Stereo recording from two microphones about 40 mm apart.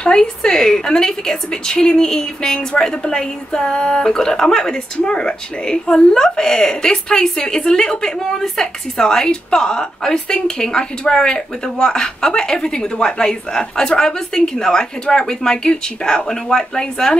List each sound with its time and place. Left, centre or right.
0.0 s a woman's voice: centre